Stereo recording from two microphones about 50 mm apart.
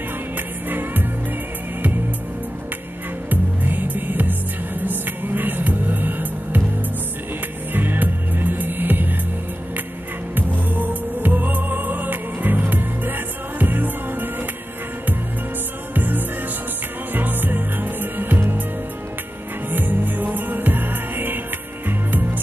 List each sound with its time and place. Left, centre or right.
0.7 s music: right
3.3 s music: right
7.7 s music: right
10.3 s music: right
15.9 s music: right
19.7 s music: right